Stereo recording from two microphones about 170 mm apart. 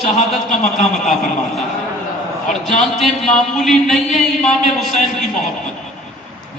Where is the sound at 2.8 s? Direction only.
Centre (ahead or behind).